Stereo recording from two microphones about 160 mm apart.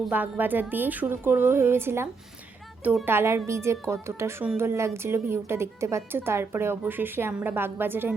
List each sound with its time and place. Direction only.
0.0 s speech: 10° right (ahead or behind)